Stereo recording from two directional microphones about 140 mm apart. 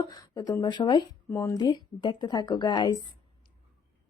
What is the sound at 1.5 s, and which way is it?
Speech, 30° left (ahead or behind).